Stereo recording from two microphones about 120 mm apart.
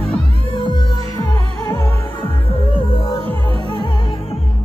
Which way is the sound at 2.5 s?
45° left (ahead or behind).